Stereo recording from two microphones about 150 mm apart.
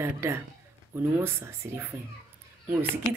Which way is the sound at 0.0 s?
15° right (ahead or behind).